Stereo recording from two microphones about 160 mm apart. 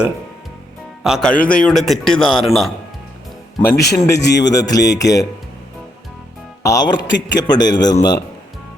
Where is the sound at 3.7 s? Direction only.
90° left.